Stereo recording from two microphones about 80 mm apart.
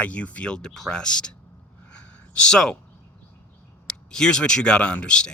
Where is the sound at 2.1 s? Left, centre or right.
Centre.